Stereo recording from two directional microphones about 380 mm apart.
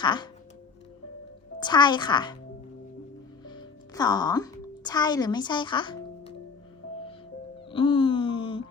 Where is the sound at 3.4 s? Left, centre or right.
Centre.